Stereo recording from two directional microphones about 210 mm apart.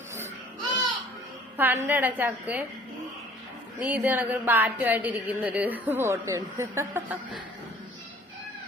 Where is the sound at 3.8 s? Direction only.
10° right (ahead or behind).